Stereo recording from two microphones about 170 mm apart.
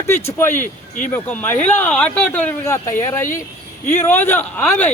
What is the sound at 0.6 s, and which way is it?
Speech, 50° left (ahead or behind).